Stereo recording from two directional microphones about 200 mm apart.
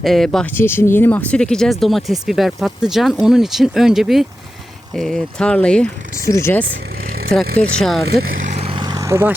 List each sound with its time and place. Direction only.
0.0 s speech: centre (ahead or behind)
8.5 s vehicle: 25° right (ahead or behind)